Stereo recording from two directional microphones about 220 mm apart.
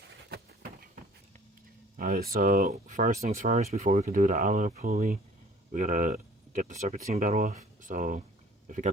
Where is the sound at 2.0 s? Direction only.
40° right (ahead or behind).